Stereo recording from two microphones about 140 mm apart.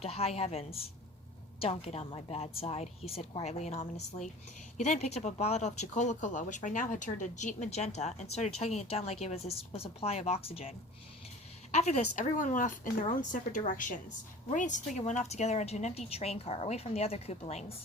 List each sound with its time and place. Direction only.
0.0 s a woman's voice: 45° left (ahead or behind)
11.7 s a woman's voice: 55° left (ahead or behind)